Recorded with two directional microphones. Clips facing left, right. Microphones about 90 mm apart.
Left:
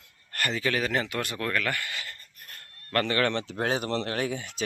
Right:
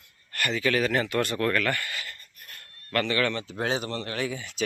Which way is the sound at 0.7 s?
20° left (ahead or behind).